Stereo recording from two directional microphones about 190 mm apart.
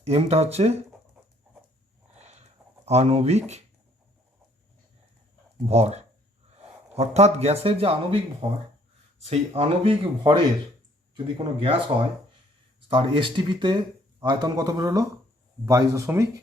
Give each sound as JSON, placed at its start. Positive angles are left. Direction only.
{"t": 0.0, "sound": "speech", "side_deg": -35}
{"t": 2.1, "sound": "a sound", "side_deg": -35}
{"t": 2.8, "sound": "speech", "side_deg": -35}
{"t": 5.6, "sound": "speech", "side_deg": -35}